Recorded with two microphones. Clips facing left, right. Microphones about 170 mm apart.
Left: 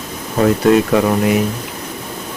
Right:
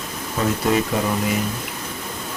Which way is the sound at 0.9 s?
70° left (ahead or behind).